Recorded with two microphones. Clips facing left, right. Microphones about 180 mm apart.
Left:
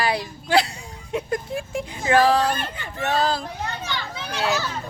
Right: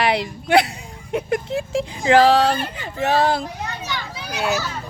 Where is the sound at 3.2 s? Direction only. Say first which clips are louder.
Right 2 dB; 25° right (ahead or behind).